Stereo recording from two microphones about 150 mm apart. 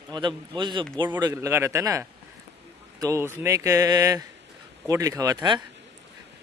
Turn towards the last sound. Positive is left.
turn(degrees=-25)  # may be behind; listen again after turning